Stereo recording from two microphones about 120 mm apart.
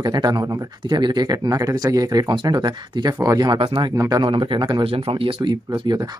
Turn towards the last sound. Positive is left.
turn(degrees=-40)  # may be behind; listen again after turning